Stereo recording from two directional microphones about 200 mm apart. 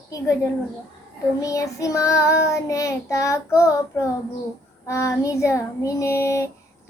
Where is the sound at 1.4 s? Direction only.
15° left (ahead or behind).